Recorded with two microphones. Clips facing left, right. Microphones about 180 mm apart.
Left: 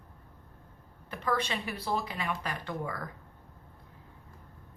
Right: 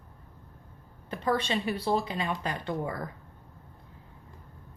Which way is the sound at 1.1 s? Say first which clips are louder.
Right 4 dB; 30° right (ahead or behind).